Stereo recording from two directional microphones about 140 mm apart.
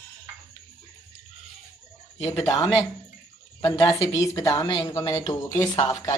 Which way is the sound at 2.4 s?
25° left (ahead or behind).